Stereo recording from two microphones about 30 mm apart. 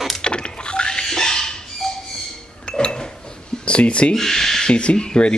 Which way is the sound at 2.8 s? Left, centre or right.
Left.